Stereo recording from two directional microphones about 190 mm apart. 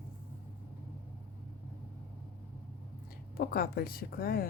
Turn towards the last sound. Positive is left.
turn(degrees=55)  # may be behind; listen again after turning